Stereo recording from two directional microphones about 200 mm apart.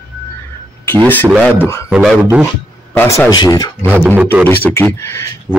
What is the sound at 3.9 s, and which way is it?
Speech, 10° right (ahead or behind).